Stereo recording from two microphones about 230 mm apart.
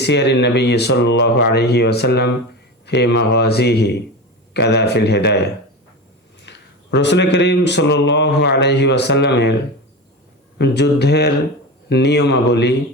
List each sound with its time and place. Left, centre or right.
0.0 s speech: left
6.9 s speech: left
10.6 s speech: left